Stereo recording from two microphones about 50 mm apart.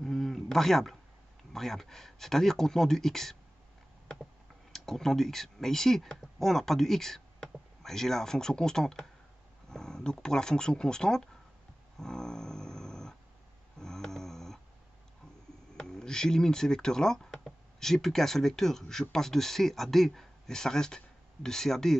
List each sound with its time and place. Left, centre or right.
0.0 s a sound: centre
1.5 s speech: centre
4.7 s speech: centre
12.0 s dog: centre
15.8 s speech: centre